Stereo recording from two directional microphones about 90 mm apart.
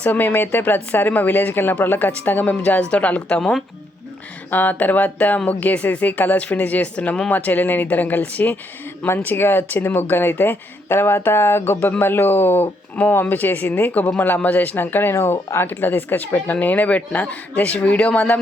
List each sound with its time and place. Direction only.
0.0 s speech: 20° left (ahead or behind)